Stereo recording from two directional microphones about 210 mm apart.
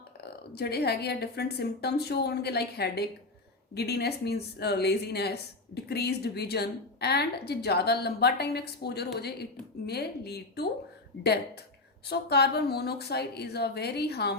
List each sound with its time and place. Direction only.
0.2 s speech: 50° left (ahead or behind)
12.0 s speech: 50° left (ahead or behind)